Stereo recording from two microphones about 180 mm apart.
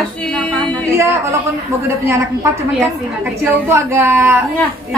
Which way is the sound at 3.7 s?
15° right (ahead or behind).